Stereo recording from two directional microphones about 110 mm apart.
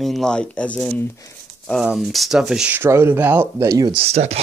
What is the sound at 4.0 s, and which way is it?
Speech, 70° right (ahead or behind).